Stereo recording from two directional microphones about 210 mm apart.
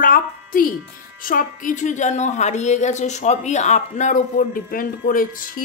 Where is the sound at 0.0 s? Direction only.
40° left (ahead or behind).